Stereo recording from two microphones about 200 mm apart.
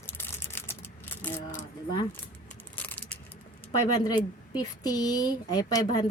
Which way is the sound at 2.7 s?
10° left (ahead or behind).